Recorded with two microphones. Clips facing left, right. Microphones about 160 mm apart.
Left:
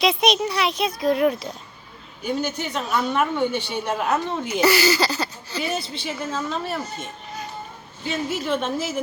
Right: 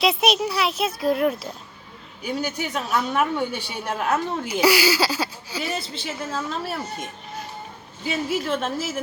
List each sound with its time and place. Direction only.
0.0 s speech: 5° right (ahead or behind)